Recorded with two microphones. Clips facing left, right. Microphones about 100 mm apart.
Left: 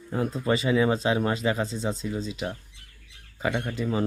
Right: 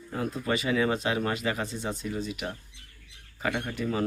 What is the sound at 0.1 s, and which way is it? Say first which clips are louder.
Speech: left 4 dB; 30° left (ahead or behind).